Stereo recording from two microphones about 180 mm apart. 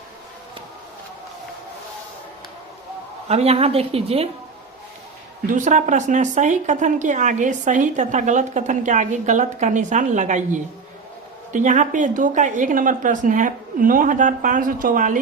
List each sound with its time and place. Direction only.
3.2 s speech: 35° right (ahead or behind)
5.5 s a woman's voice: 45° right (ahead or behind)